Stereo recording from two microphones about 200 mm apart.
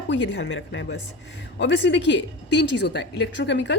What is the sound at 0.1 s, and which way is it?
A woman's voice, 65° left (ahead or behind).